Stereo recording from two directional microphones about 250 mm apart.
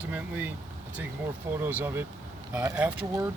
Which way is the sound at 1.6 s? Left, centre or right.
Centre.